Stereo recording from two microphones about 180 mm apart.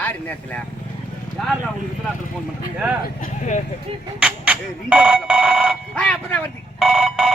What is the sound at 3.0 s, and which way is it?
Speech, 45° left (ahead or behind).